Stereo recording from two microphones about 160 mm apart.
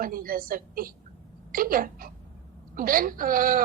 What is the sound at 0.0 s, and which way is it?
A woman's voice, 65° right (ahead or behind).